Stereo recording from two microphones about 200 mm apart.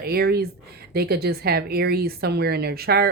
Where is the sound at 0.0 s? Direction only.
50° right (ahead or behind).